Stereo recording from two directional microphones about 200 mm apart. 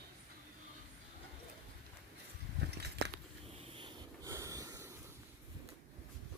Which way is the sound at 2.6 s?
55° right (ahead or behind).